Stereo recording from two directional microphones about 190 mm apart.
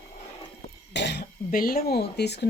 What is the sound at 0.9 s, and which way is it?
Speech, 60° left (ahead or behind).